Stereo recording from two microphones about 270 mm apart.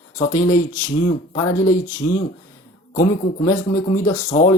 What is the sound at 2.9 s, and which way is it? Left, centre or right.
Speech, left.